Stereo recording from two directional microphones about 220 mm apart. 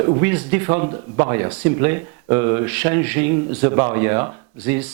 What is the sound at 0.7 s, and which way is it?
Speech, 25° right (ahead or behind).